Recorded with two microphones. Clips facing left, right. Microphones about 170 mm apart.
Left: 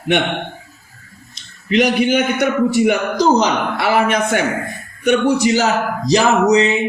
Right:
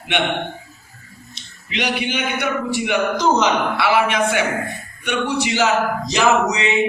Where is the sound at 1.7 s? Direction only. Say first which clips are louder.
Left 9 dB; 45° left (ahead or behind).